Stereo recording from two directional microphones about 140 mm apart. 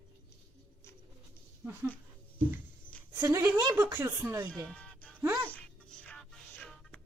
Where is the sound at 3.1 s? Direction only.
20° right (ahead or behind).